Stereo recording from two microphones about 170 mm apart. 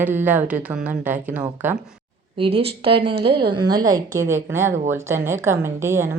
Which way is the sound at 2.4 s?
35° right (ahead or behind).